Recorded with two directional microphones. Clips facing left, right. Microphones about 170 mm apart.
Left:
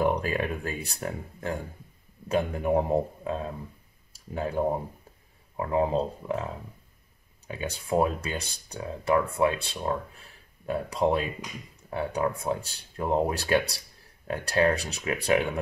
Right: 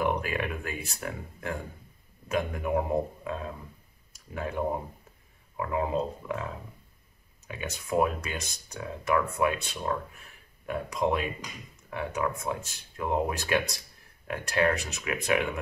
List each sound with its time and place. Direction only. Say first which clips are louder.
0.0 s speech: left 3 dB; 35° left (ahead or behind)
7.4 s speech: left 3 dB; 30° left (ahead or behind)